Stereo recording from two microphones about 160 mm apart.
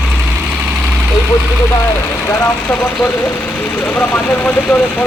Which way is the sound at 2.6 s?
10° left (ahead or behind).